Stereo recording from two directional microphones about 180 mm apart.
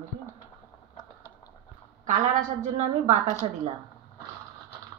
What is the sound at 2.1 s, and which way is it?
A woman's voice, 45° right (ahead or behind).